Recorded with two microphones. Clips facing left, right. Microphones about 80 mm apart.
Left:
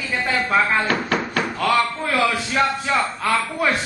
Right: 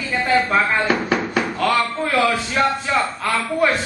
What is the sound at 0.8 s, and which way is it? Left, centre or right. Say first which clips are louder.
Speech: right 2 dB; centre.